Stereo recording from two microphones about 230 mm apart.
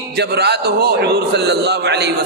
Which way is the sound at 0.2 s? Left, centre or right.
Right.